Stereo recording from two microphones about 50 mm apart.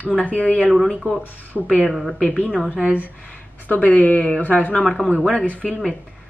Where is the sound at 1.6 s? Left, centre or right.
Left.